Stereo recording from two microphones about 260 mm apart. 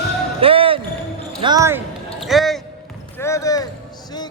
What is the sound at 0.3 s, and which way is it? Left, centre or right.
Basketball bounce, right.